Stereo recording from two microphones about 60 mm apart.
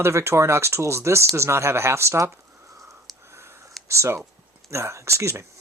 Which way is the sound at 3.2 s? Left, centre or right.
Right.